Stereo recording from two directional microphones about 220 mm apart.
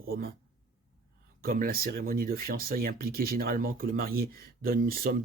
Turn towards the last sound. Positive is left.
turn(degrees=-40)  # may be behind; listen again after turning